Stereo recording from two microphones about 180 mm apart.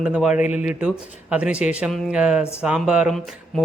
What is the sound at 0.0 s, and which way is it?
Speech, 5° right (ahead or behind).